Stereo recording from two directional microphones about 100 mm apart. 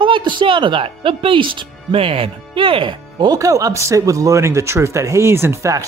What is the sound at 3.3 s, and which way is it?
Speech, 35° right (ahead or behind).